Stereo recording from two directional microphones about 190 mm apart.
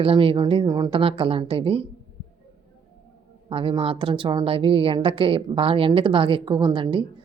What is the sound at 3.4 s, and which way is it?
A woman's voice, 30° right (ahead or behind).